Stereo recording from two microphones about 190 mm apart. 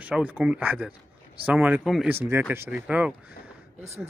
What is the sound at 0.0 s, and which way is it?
Speech, 10° right (ahead or behind).